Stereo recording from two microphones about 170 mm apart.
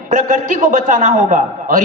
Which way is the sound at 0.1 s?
50° right (ahead or behind).